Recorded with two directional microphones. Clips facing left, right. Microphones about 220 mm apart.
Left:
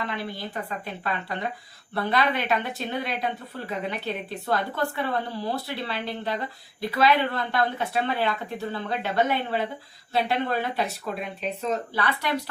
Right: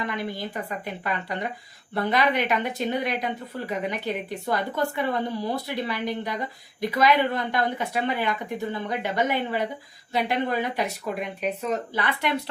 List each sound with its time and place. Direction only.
0.0 s speech: 15° right (ahead or behind)